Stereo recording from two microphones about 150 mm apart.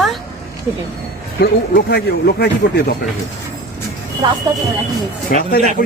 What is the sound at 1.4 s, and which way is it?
Speech, 90° left.